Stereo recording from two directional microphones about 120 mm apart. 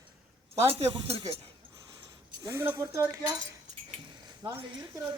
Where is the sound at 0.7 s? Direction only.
55° right (ahead or behind).